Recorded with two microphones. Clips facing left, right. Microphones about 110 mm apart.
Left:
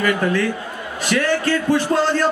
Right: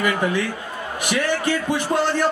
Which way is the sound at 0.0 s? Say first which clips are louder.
Left 3 dB; 15° right (ahead or behind).